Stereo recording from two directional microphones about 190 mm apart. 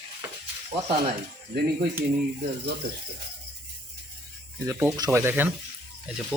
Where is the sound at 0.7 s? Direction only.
30° right (ahead or behind).